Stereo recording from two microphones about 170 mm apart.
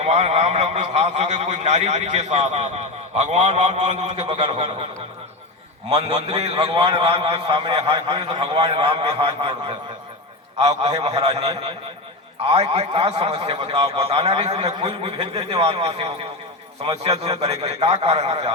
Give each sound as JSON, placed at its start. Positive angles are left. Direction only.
{"t": 0.0, "sound": "a man's voice", "side_deg": -40}
{"t": 5.9, "sound": "a man's voice", "side_deg": -30}